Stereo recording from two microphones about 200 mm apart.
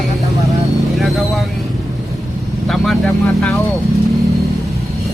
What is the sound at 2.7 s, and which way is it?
Speech, centre (ahead or behind).